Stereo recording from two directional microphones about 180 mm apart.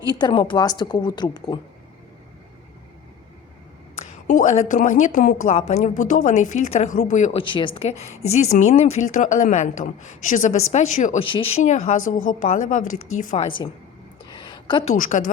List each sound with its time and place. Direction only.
0.1 s a woman's voice: 25° left (ahead or behind)
4.1 s a sound: 45° left (ahead or behind)
4.7 s speech: 45° left (ahead or behind)
7.3 s speech: 25° left (ahead or behind)
11.2 s a woman's voice: 30° left (ahead or behind)
11.6 s speech: 40° left (ahead or behind)
14.3 s a sound: 25° left (ahead or behind)
14.8 s speech: 45° left (ahead or behind)